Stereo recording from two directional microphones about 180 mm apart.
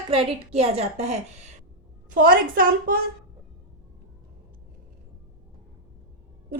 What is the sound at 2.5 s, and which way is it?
Speech, 55° right (ahead or behind).